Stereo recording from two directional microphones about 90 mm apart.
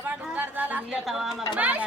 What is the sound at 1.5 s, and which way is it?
Speech, 15° right (ahead or behind).